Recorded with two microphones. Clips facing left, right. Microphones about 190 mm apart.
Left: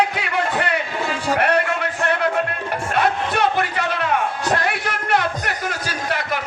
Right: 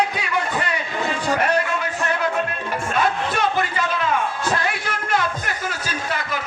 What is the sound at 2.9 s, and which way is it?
Music, 65° left (ahead or behind).